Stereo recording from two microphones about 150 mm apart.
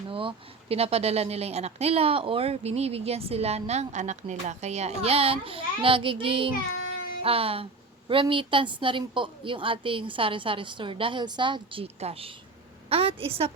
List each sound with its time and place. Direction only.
0.1 s a woman's voice: 35° right (ahead or behind)